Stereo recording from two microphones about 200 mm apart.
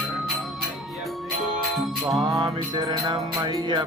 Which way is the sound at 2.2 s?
20° right (ahead or behind).